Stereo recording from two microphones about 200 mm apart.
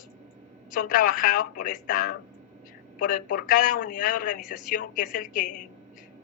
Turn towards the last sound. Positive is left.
turn(degrees=40)  # may be behind; listen again after turning